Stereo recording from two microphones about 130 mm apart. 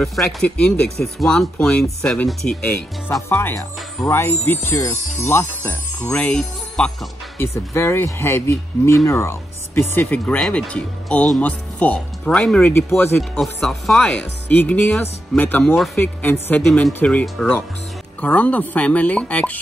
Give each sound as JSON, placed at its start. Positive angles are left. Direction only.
{"t": 0.0, "sound": "speech", "side_deg": 0}
{"t": 3.1, "sound": "speech", "side_deg": 20}
{"t": 7.3, "sound": "speech", "side_deg": 20}
{"t": 13.2, "sound": "speech", "side_deg": 0}